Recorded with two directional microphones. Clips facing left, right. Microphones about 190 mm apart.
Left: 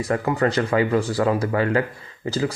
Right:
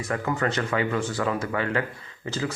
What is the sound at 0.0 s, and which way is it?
Speech, 35° left (ahead or behind).